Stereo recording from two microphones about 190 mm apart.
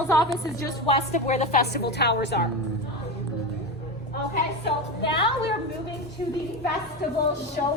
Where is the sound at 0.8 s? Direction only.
35° left (ahead or behind).